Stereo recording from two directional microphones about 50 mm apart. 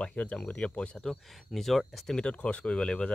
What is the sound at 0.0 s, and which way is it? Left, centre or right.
Speech, left.